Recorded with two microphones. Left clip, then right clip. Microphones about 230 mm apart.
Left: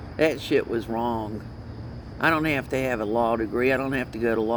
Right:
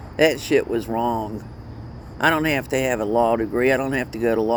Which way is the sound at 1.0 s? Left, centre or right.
Right.